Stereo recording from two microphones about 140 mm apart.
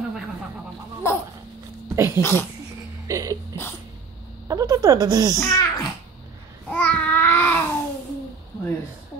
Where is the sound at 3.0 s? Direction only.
25° right (ahead or behind).